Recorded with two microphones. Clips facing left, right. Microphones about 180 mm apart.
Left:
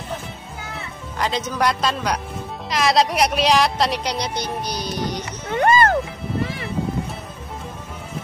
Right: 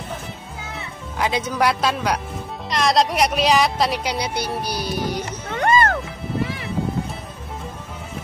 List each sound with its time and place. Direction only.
0.7 s a woman's voice: 5° right (ahead or behind)
5.7 s music: 35° left (ahead or behind)